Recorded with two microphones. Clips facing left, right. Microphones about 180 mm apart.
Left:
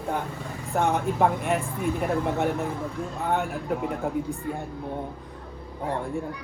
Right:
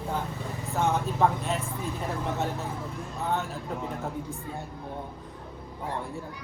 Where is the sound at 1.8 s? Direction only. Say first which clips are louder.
Left 7 dB; 15° left (ahead or behind).